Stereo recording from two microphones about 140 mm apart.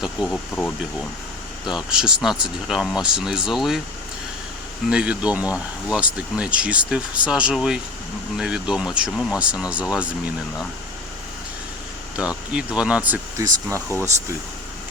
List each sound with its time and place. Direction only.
0.0 s speech: 5° right (ahead or behind)
1.7 s speech: 5° right (ahead or behind)
4.9 s speech: 5° right (ahead or behind)
12.1 s speech: 5° right (ahead or behind)
13.4 s speech: 20° right (ahead or behind)